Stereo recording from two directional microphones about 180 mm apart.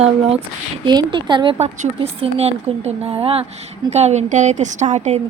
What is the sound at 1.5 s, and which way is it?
A woman's voice, 35° right (ahead or behind).